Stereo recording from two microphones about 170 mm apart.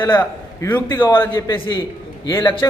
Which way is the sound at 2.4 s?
30° left (ahead or behind).